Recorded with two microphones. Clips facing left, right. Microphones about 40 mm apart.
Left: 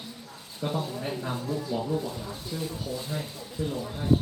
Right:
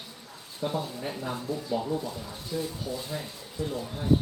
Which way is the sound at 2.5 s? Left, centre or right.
Centre.